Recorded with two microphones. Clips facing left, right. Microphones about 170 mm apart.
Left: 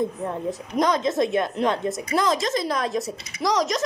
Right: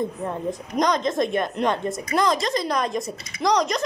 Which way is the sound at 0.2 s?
5° left (ahead or behind).